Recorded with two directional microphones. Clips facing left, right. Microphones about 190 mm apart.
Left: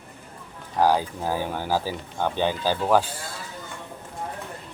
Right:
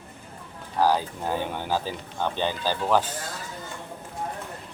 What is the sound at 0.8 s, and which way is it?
Speech, 15° left (ahead or behind).